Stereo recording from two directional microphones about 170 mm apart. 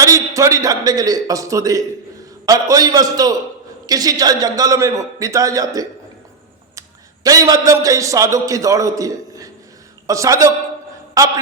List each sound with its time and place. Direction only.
0.0 s a man's voice: 20° right (ahead or behind)
7.3 s a man's voice: 20° right (ahead or behind)